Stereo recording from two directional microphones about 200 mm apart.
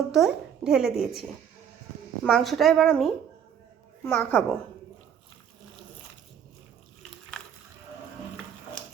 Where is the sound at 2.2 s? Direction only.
Centre (ahead or behind).